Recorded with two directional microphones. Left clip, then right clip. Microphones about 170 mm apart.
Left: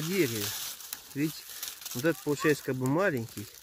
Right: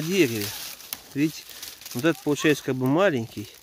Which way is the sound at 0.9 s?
70° right (ahead or behind).